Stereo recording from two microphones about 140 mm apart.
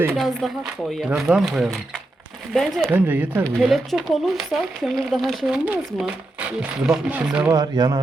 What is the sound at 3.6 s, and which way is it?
Speech, centre (ahead or behind).